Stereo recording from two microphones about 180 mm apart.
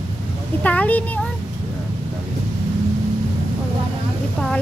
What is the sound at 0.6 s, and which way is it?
Speech, 10° left (ahead or behind).